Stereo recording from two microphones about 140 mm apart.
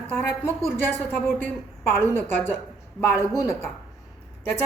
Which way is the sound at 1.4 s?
15° left (ahead or behind).